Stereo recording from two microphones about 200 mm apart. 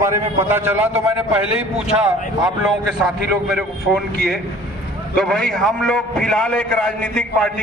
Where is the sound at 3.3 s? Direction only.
Centre (ahead or behind).